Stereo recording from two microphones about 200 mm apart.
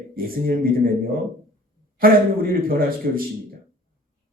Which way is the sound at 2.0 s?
45° right (ahead or behind).